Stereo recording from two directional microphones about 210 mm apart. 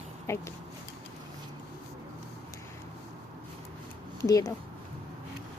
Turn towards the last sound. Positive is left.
turn(degrees=15)  # may be behind; listen again after turning